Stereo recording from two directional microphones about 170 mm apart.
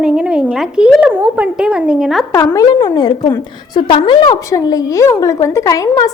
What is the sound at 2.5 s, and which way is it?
A woman's voice, 20° left (ahead or behind).